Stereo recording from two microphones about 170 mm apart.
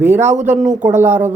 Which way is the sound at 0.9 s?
10° right (ahead or behind).